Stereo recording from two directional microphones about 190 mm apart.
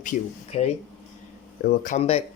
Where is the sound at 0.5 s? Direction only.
35° left (ahead or behind).